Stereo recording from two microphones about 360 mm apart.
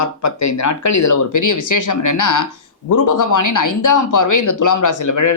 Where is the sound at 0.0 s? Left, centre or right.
Left.